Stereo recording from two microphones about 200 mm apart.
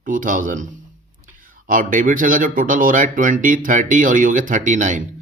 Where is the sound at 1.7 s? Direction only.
40° right (ahead or behind).